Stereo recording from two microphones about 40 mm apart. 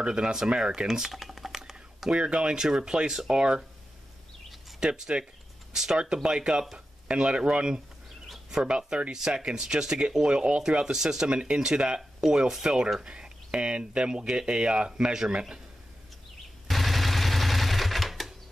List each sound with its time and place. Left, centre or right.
0.0 s speech: right
0.8 s speech: centre
1.1 s typing: centre
2.0 s speech: right
2.6 s speech: centre
4.7 s speech: centre
8.5 s speech: centre
8.7 s speech: right
11.2 s speech: right
13.0 s speech: right
16.6 s typewriter: centre